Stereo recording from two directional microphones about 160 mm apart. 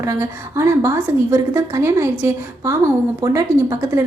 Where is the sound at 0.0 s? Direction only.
20° right (ahead or behind).